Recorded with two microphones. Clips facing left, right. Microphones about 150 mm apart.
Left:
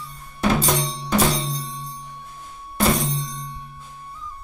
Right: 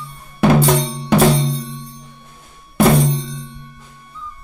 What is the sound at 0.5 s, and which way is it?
Music, 60° right (ahead or behind).